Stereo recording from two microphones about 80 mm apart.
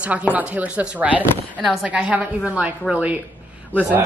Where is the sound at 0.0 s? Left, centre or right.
Centre.